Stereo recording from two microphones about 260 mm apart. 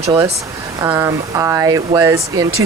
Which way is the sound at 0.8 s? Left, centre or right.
Centre.